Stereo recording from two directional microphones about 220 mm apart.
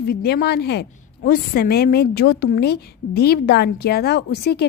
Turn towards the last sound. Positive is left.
turn(degrees=45)  # may be behind; listen again after turning